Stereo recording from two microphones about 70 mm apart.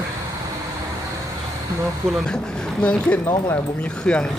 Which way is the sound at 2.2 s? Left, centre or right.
Centre.